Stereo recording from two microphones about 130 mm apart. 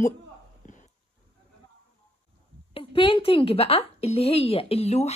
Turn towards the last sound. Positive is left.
turn(degrees=55)  # may be behind; listen again after turning